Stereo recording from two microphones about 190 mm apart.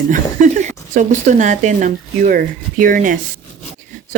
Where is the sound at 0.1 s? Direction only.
40° right (ahead or behind).